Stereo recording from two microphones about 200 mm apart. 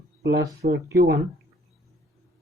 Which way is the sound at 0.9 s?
50° right (ahead or behind).